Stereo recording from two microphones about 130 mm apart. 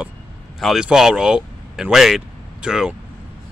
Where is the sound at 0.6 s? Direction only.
5° right (ahead or behind).